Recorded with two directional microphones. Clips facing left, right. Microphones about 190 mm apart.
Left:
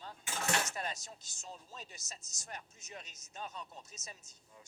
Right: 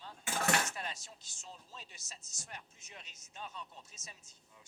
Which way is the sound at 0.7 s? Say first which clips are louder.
Left 3 dB; 45° left (ahead or behind).